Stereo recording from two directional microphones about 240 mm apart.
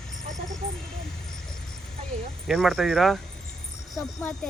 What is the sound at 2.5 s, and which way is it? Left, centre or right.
Speech, centre.